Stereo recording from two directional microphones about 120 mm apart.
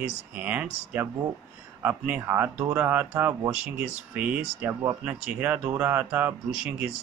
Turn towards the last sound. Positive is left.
turn(degrees=-10)  # may be behind; listen again after turning